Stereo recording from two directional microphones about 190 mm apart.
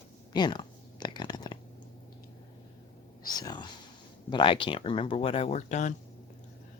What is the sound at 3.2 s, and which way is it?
Speech, 20° left (ahead or behind).